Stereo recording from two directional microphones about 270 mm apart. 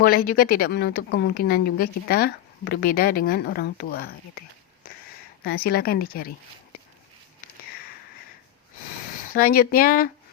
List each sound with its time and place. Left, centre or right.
0.0 s speech: left
9.3 s speech: left